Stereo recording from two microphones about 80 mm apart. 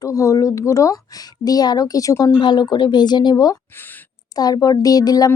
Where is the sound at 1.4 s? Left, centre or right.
Left.